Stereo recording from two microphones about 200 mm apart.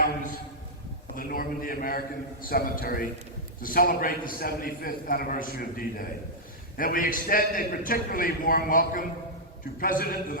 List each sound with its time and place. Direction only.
1.1 s a man's voice: 45° left (ahead or behind)